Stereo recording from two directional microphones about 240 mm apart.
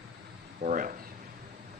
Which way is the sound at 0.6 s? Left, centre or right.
Right.